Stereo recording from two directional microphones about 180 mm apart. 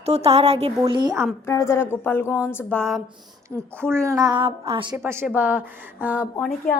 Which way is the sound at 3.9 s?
15° right (ahead or behind).